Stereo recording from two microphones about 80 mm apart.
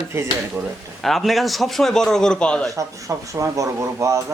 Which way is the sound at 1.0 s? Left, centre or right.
Centre.